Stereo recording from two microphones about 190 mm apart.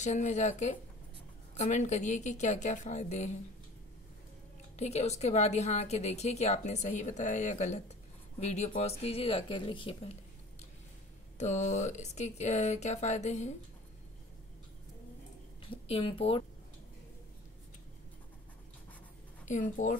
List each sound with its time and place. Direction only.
0.0 s a woman's voice: 40° left (ahead or behind)
4.7 s a woman's voice: 35° left (ahead or behind)
11.3 s a woman's voice: 40° left (ahead or behind)
15.6 s a woman's voice: 25° left (ahead or behind)
19.4 s a woman's voice: 40° left (ahead or behind)